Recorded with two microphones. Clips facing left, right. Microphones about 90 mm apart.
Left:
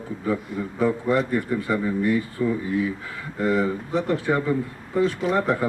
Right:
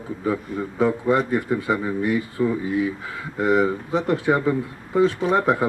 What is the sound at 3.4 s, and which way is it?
A man's voice, 20° right (ahead or behind).